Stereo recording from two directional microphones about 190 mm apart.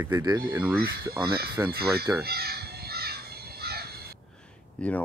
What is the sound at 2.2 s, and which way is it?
Crow, 55° right (ahead or behind).